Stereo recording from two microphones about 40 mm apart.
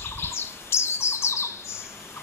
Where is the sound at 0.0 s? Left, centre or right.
Left.